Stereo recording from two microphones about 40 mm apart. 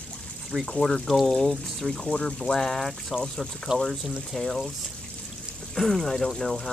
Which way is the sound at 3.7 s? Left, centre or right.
Centre.